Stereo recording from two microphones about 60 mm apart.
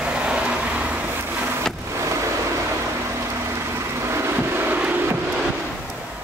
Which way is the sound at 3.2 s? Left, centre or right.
Right.